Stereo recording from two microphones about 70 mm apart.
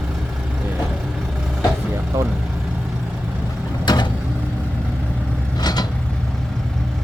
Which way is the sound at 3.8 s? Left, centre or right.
Left.